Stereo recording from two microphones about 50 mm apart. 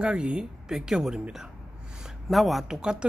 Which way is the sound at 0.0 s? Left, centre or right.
Right.